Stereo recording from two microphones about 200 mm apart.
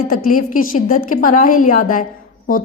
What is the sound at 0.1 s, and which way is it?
A woman's voice, 40° left (ahead or behind).